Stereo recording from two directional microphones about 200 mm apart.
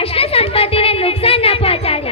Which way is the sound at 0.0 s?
30° left (ahead or behind).